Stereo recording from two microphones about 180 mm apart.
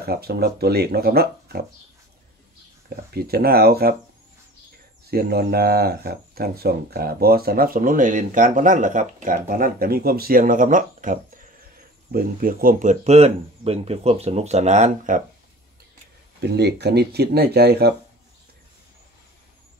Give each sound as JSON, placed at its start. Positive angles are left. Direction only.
{"t": 0.0, "sound": "speech", "side_deg": -60}
{"t": 3.1, "sound": "speech", "side_deg": -60}
{"t": 5.0, "sound": "speech", "side_deg": -60}
{"t": 16.4, "sound": "speech", "side_deg": -65}